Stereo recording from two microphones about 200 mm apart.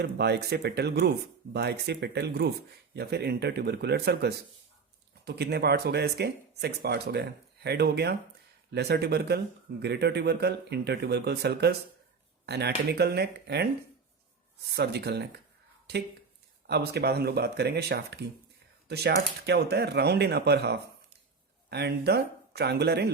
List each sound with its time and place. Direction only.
0.0 s speech: 55° right (ahead or behind)